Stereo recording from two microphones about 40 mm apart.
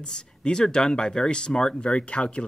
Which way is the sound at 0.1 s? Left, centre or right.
Centre.